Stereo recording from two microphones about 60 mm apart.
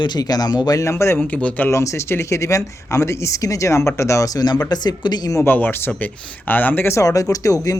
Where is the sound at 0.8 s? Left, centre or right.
Left.